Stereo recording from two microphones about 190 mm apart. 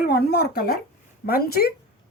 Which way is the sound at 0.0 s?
55° left (ahead or behind).